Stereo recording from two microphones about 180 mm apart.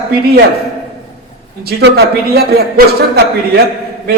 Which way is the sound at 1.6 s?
65° right (ahead or behind).